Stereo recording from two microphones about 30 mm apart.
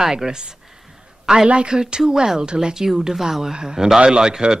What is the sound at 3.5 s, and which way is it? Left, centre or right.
A woman's voice, right.